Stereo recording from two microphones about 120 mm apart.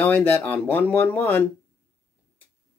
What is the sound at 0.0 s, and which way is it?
Speech, 15° left (ahead or behind).